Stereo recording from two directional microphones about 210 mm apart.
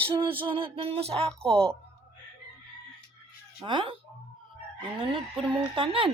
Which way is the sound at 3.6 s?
25° right (ahead or behind).